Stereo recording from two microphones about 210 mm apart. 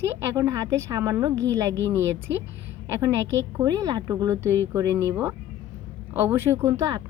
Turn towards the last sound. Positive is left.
turn(degrees=-15)  # may be behind; listen again after turning